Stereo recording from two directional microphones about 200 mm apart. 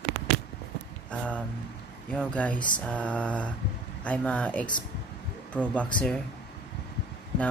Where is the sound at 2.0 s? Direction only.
5° left (ahead or behind).